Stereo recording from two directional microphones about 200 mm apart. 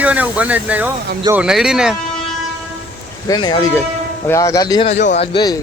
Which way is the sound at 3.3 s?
20° left (ahead or behind).